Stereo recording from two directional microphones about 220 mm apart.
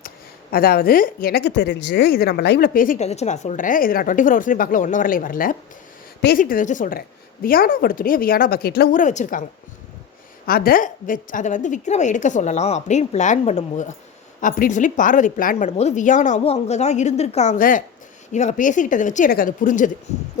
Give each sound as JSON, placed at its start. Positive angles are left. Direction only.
{"t": 0.5, "sound": "speech", "side_deg": 45}
{"t": 10.4, "sound": "speech", "side_deg": 40}